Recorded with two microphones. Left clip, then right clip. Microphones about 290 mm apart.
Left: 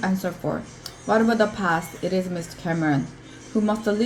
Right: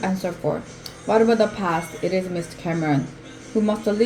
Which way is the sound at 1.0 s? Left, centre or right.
Left.